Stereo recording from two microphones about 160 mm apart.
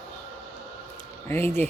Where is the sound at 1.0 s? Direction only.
15° left (ahead or behind).